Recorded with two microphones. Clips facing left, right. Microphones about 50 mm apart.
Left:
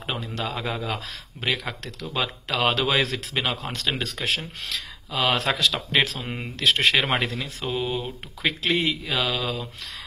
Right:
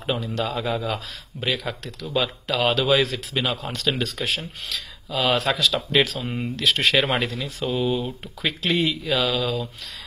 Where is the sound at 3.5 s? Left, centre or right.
Left.